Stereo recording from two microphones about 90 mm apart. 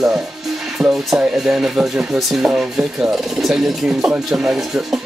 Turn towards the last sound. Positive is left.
turn(degrees=-5)  # may be behind; listen again after turning